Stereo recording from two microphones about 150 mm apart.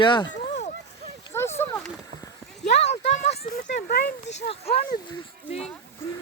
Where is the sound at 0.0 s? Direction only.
30° left (ahead or behind).